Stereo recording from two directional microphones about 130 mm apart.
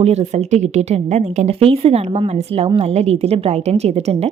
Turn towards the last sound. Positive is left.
turn(degrees=-55)  # may be behind; listen again after turning